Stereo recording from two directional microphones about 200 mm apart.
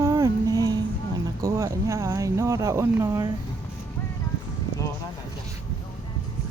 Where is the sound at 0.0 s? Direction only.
15° right (ahead or behind).